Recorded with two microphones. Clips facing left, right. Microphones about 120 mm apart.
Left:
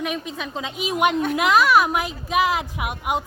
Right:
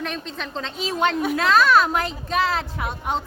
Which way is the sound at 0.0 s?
10° left (ahead or behind).